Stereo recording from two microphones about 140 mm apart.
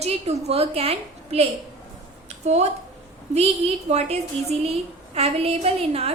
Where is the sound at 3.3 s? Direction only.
50° right (ahead or behind).